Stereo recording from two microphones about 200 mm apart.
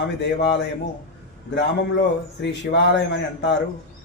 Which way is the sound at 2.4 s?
60° left (ahead or behind).